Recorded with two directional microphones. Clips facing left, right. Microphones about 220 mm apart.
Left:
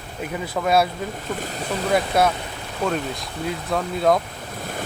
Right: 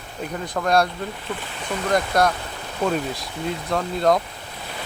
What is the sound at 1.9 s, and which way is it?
Speech, 5° left (ahead or behind).